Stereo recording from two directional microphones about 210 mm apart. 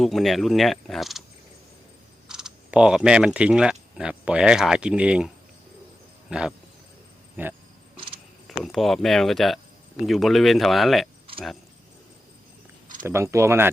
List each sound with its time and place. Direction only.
0.0 s speech: centre (ahead or behind)
2.2 s speech: 5° right (ahead or behind)
7.4 s speech: 10° right (ahead or behind)
13.0 s speech: 10° right (ahead or behind)